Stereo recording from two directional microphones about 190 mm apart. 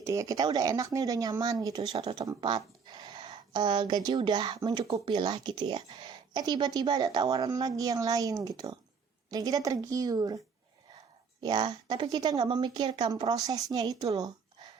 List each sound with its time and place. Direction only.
0.0 s speech: 15° right (ahead or behind)